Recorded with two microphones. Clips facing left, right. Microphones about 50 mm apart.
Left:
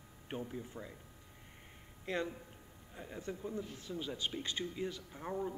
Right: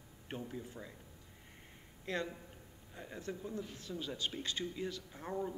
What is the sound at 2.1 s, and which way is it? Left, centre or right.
A man's voice, centre.